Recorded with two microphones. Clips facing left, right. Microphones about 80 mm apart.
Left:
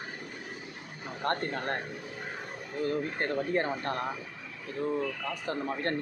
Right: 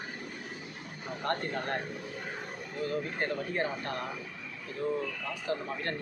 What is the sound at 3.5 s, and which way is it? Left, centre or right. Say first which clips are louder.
Speech: left 3 dB; left.